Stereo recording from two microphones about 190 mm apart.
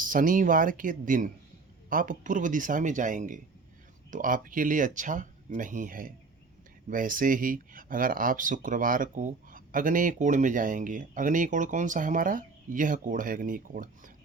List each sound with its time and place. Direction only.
0.0 s speech: 45° right (ahead or behind)